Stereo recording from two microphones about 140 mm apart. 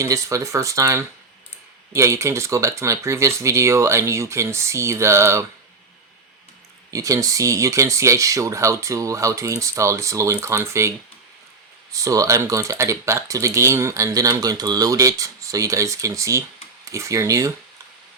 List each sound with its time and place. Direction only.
0.0 s speech: 20° right (ahead or behind)
6.9 s speech: 25° right (ahead or behind)